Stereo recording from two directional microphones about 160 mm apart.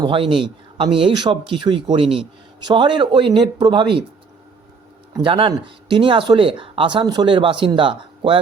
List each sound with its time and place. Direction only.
0.0 s speech: 35° right (ahead or behind)
5.2 s speech: 30° right (ahead or behind)